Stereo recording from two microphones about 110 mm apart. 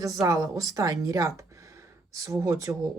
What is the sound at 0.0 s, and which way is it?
Speech, 30° right (ahead or behind).